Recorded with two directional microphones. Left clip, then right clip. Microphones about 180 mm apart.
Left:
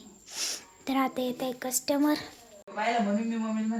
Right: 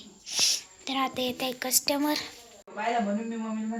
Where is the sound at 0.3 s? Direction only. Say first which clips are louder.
Right 9 dB; 45° left (ahead or behind); by 2.3 s 25° left (ahead or behind).